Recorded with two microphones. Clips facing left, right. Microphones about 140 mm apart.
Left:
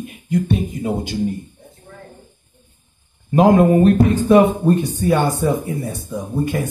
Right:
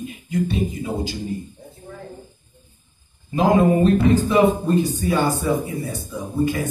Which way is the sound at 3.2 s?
60° left (ahead or behind).